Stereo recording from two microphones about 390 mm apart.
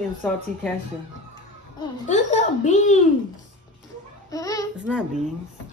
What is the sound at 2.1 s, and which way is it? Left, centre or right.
Speech, centre.